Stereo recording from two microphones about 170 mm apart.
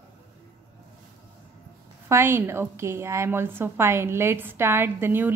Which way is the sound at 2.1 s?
15° right (ahead or behind).